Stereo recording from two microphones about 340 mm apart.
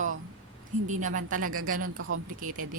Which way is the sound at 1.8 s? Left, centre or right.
Right.